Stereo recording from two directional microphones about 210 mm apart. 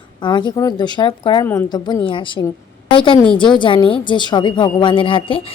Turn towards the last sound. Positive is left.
turn(degrees=25)  # may be behind; listen again after turning